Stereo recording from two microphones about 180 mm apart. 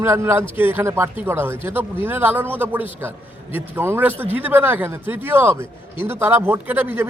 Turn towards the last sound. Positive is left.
turn(degrees=-10)  # may be behind; listen again after turning